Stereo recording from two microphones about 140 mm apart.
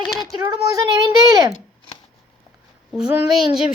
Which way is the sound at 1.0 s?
25° right (ahead or behind).